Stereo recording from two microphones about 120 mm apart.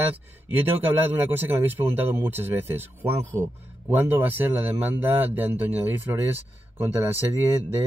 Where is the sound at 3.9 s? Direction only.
15° right (ahead or behind).